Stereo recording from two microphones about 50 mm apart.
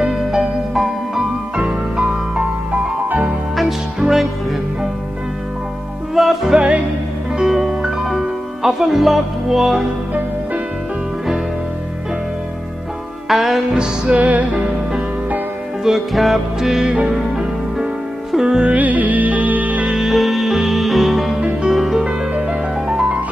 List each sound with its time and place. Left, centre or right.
0.0 s music: centre
1.6 s music: centre
3.5 s music: centre
6.1 s music: centre
8.6 s speech: centre
13.3 s speech: centre
13.7 s music: right
15.8 s speech: centre
17.1 s music: centre
18.7 s music: right
19.9 s music: centre
22.0 s music: right